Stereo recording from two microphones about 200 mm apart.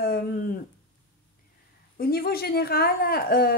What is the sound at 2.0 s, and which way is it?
Speech, 50° left (ahead or behind).